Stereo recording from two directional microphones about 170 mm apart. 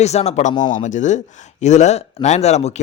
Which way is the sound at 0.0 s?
40° left (ahead or behind).